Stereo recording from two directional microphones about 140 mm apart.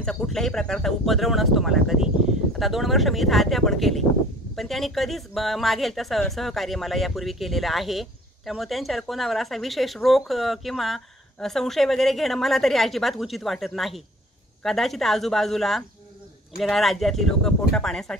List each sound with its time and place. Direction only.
0.0 s a woman's voice: 5° left (ahead or behind)